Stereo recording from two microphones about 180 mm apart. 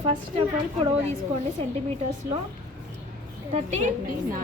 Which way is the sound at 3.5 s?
40° right (ahead or behind).